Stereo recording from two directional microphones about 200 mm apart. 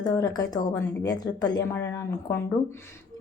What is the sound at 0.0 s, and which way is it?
A woman's voice, 20° left (ahead or behind).